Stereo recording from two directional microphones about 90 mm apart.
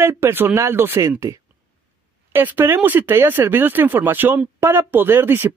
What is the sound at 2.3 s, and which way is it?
Speech, 25° right (ahead or behind).